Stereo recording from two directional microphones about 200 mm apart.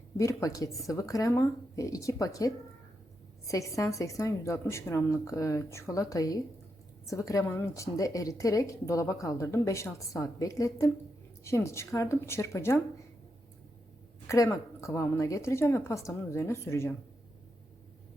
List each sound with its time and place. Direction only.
0.2 s a woman's voice: 15° left (ahead or behind)
14.3 s a woman's voice: 15° left (ahead or behind)